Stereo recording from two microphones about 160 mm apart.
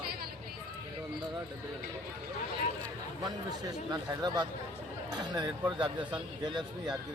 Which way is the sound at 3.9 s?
25° right (ahead or behind).